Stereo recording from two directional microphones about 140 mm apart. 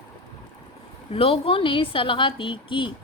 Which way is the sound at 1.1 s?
45° left (ahead or behind).